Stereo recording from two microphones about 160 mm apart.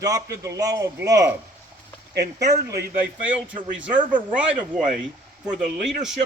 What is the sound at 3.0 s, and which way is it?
Speech, 10° right (ahead or behind).